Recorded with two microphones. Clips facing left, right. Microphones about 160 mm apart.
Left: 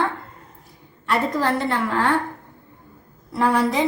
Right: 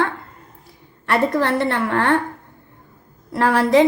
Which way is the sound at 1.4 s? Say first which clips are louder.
Right 2 dB; 65° right (ahead or behind).